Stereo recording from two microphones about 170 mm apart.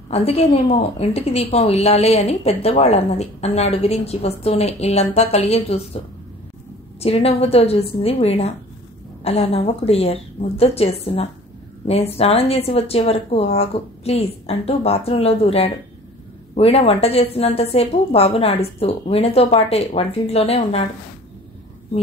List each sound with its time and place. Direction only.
0.1 s a woman's voice: 35° left (ahead or behind)
7.0 s a woman's voice: 35° left (ahead or behind)